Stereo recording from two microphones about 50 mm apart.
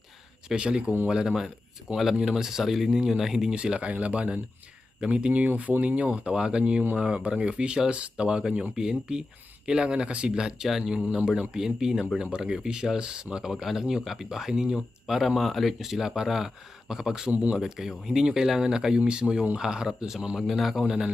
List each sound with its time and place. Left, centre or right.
0.4 s speech: centre
3.5 s speech: right